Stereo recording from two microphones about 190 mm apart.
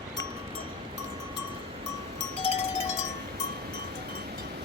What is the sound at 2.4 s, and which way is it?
Cowbell, 35° left (ahead or behind).